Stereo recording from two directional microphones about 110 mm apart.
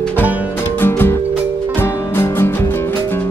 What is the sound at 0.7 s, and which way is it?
Music, 20° left (ahead or behind).